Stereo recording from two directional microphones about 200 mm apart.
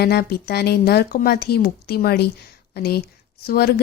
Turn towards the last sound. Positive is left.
turn(degrees=50)  # may be behind; listen again after turning